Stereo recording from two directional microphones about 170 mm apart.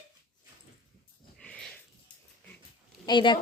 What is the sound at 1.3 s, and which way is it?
Sniff, 5° left (ahead or behind).